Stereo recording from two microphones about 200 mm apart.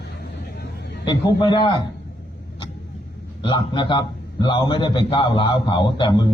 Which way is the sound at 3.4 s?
25° left (ahead or behind).